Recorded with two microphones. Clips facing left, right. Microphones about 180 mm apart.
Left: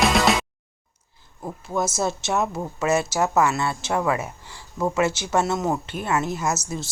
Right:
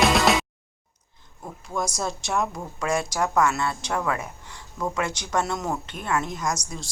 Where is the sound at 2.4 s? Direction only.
25° left (ahead or behind).